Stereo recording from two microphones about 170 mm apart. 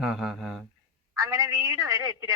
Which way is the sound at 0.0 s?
5° right (ahead or behind).